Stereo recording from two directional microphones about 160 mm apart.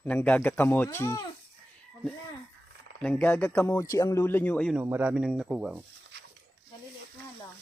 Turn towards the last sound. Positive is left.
turn(degrees=0)  # may be behind; listen again after turning